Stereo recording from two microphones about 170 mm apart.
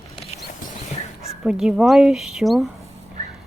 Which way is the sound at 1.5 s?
5° right (ahead or behind).